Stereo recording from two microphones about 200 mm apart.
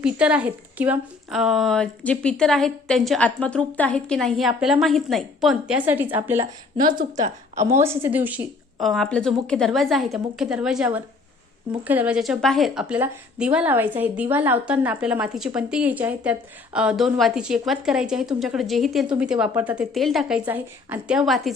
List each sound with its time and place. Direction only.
0.0 s a woman's voice: 5° right (ahead or behind)
6.4 s a woman's voice: 40° right (ahead or behind)
7.7 s a woman's voice: 15° right (ahead or behind)